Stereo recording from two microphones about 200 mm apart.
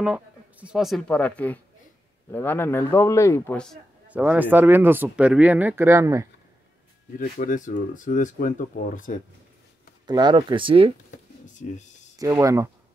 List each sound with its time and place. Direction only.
0.0 s a man's voice: 5° right (ahead or behind)
4.1 s speech: 10° right (ahead or behind)
7.2 s speech: 45° left (ahead or behind)
10.0 s speech: 20° right (ahead or behind)
12.2 s speech: 15° right (ahead or behind)